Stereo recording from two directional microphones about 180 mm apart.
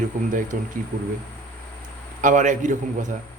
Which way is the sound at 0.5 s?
50° right (ahead or behind).